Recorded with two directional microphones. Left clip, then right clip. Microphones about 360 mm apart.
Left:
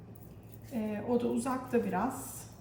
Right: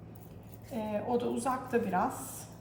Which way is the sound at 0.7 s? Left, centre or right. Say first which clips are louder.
Right 1 dB; centre.